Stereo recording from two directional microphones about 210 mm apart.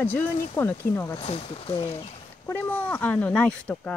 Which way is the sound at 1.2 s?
25° left (ahead or behind).